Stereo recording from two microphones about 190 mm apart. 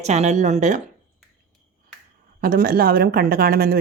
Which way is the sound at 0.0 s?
35° right (ahead or behind).